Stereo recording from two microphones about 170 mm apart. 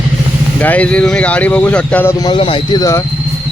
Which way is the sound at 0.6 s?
10° left (ahead or behind).